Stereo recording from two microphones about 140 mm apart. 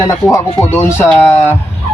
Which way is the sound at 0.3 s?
20° left (ahead or behind).